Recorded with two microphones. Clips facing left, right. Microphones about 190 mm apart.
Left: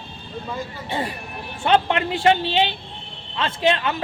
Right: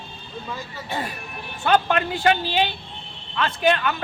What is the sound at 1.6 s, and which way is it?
Speech, 25° left (ahead or behind).